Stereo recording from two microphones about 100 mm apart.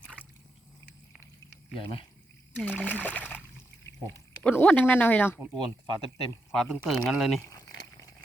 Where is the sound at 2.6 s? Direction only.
15° left (ahead or behind).